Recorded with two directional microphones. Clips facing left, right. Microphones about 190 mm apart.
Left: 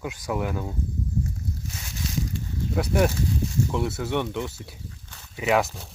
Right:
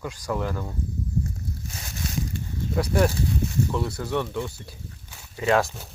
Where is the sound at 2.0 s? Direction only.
50° right (ahead or behind).